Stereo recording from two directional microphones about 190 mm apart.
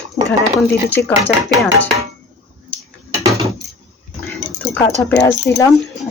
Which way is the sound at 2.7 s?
5° left (ahead or behind).